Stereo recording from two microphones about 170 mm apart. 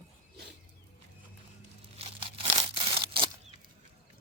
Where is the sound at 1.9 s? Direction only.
35° right (ahead or behind).